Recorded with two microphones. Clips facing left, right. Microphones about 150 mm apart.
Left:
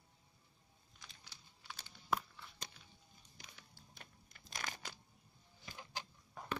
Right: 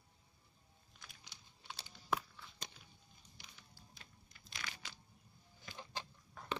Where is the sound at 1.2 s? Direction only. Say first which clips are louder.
Right 2 dB; 25° right (ahead or behind).